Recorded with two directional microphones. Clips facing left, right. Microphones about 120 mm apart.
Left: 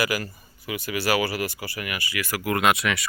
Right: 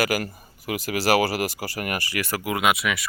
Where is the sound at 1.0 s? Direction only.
40° right (ahead or behind).